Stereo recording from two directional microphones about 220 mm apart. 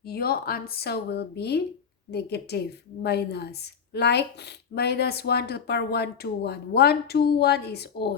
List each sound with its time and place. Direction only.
0.0 s a woman's voice: 45° left (ahead or behind)